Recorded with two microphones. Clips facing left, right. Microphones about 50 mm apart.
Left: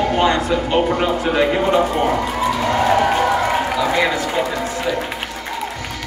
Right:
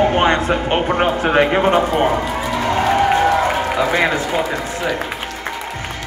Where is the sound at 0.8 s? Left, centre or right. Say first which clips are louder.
Right 2 dB; right.